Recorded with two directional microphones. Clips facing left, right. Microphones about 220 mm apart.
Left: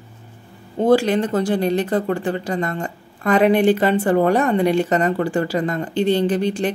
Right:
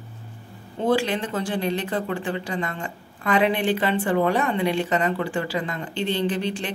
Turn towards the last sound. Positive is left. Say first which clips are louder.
# left 6 dB
turn(degrees=45)  # may be behind; listen again after turning